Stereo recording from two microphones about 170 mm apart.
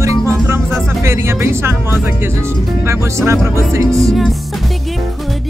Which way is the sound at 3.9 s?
Centre (ahead or behind).